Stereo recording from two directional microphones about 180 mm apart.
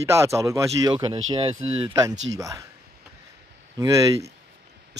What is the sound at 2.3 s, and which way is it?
Speech, 20° right (ahead or behind).